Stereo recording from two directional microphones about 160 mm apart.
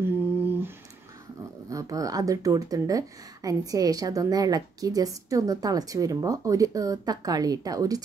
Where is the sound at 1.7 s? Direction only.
20° right (ahead or behind).